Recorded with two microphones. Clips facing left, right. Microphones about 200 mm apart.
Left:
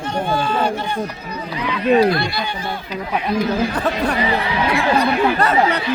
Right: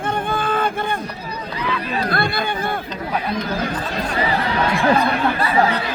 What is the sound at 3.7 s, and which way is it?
Speech, 65° left (ahead or behind).